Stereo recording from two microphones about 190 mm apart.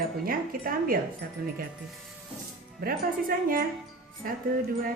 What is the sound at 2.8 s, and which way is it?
A woman's voice, 50° right (ahead or behind).